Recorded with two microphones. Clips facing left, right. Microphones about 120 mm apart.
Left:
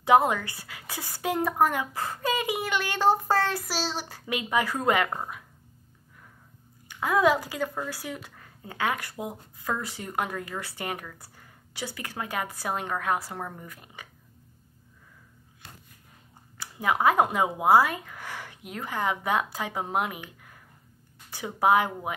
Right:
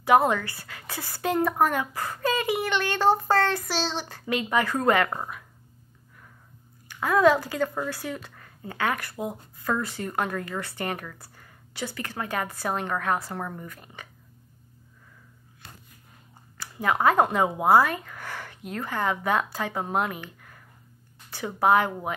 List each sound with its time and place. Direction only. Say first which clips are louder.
0.0 s speech: right 1 dB; 15° left (ahead or behind)
6.9 s a woman's voice: right 3 dB; 15° left (ahead or behind)
16.5 s speech: right 1 dB; 15° left (ahead or behind)